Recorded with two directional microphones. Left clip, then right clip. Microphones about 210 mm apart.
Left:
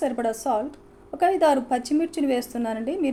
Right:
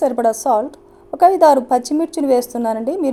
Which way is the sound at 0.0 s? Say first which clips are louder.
Right 9 dB; 30° right (ahead or behind).